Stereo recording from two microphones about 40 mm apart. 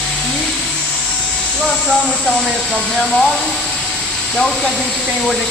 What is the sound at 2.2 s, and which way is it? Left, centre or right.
Speech, centre.